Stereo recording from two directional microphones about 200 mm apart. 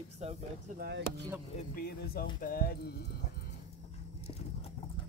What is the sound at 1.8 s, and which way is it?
Speech, 50° left (ahead or behind).